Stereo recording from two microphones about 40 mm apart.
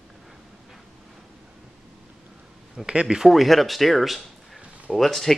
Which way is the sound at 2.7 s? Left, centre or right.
Right.